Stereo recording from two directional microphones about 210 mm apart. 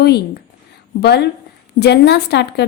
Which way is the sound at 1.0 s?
50° left (ahead or behind).